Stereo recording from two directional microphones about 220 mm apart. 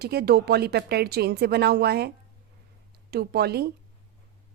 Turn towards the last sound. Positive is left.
turn(degrees=-45)  # may be behind; listen again after turning